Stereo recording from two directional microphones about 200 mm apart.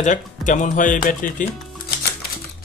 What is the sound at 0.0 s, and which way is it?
Speech, 40° left (ahead or behind).